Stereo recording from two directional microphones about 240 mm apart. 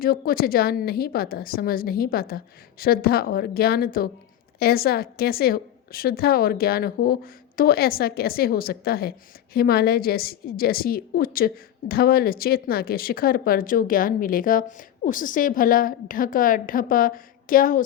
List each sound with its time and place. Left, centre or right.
0.0 s a woman's voice: left